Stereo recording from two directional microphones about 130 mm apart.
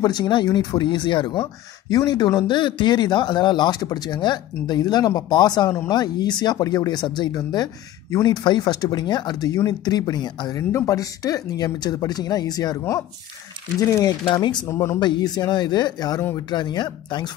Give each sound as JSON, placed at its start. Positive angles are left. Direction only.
{"t": 0.0, "sound": "speech", "side_deg": 35}
{"t": 14.7, "sound": "speech", "side_deg": 20}
{"t": 15.0, "sound": "speech", "side_deg": 35}